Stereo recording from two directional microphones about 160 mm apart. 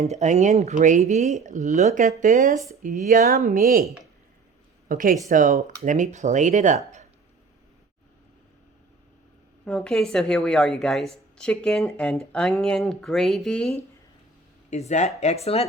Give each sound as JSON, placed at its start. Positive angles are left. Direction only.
{"t": 0.0, "sound": "speech", "side_deg": -45}
{"t": 4.9, "sound": "speech", "side_deg": -60}
{"t": 9.6, "sound": "a woman's voice", "side_deg": 5}
{"t": 14.7, "sound": "speech", "side_deg": 45}